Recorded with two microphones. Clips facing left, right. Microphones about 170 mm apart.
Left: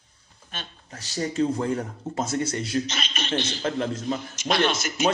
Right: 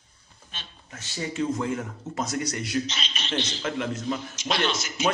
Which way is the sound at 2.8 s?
50° left (ahead or behind).